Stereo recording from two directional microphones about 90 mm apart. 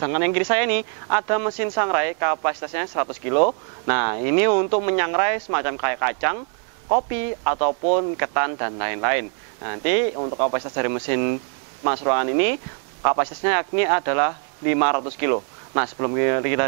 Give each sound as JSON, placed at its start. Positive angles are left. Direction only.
{"t": 0.0, "sound": "speech", "side_deg": -15}